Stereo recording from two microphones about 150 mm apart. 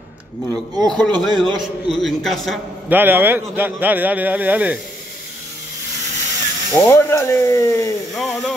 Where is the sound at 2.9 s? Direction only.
15° right (ahead or behind).